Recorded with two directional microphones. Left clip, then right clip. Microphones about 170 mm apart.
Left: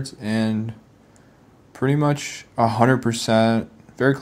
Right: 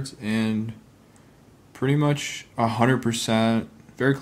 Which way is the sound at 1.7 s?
15° left (ahead or behind).